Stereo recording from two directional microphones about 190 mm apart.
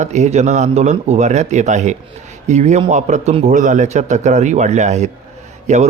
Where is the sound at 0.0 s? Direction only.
35° right (ahead or behind).